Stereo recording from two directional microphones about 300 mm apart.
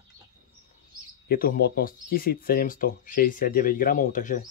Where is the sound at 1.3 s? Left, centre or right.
Left.